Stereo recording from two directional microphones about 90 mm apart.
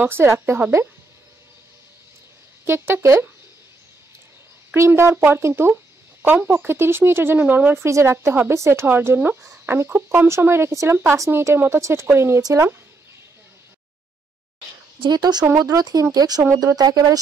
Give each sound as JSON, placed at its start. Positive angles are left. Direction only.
{"t": 0.0, "sound": "speech", "side_deg": -25}
{"t": 2.6, "sound": "speech", "side_deg": -25}
{"t": 4.7, "sound": "speech", "side_deg": -30}
{"t": 12.4, "sound": "speech", "side_deg": -45}
{"t": 15.1, "sound": "speech", "side_deg": -50}